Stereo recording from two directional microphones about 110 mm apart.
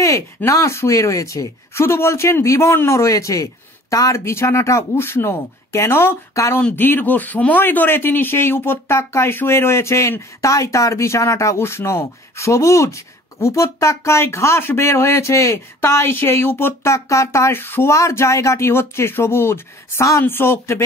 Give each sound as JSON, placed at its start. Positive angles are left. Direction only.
{"t": 0.5, "sound": "speech", "side_deg": 25}